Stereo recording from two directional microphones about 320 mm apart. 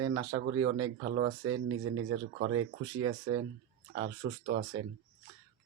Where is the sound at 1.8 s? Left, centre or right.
Right.